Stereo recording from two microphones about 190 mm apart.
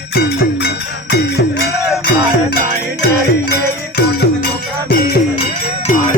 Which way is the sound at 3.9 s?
55° left (ahead or behind).